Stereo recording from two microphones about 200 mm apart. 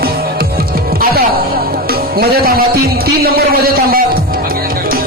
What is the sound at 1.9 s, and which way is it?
Music, 50° right (ahead or behind).